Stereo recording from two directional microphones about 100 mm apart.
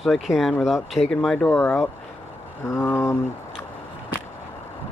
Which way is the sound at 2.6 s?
25° left (ahead or behind).